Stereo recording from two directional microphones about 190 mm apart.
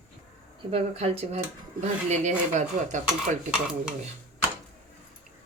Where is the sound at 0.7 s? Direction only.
35° right (ahead or behind).